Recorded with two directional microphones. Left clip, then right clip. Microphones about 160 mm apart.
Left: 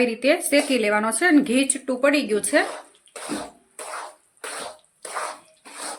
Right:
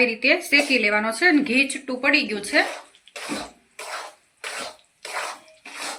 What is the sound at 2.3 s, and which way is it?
Speech, 80° left.